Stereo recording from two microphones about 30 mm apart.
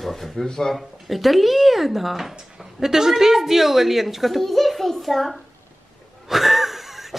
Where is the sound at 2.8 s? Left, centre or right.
Centre.